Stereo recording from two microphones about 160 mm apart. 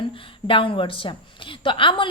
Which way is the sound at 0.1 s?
35° left (ahead or behind).